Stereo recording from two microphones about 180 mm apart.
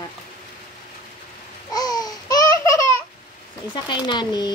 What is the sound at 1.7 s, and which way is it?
Babbling, 20° left (ahead or behind).